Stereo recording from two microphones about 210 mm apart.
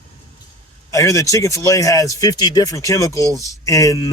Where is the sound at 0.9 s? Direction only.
15° left (ahead or behind).